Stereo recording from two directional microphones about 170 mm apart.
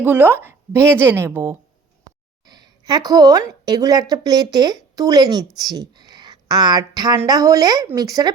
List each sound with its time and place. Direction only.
0.0 s a woman's voice: 10° right (ahead or behind)